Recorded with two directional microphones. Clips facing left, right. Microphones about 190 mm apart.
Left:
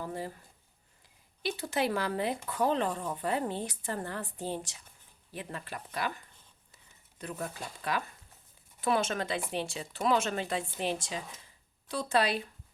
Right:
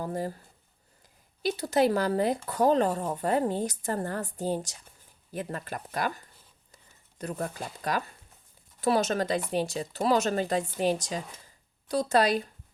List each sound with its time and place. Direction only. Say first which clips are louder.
0.0 s speech: right 5 dB; 45° right (ahead or behind)
1.4 s speech: right 7 dB; 40° right (ahead or behind)